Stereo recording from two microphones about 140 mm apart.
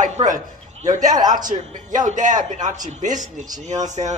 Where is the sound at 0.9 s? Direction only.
30° right (ahead or behind).